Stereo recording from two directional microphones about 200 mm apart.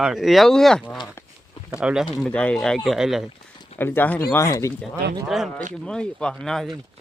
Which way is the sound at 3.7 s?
10° left (ahead or behind).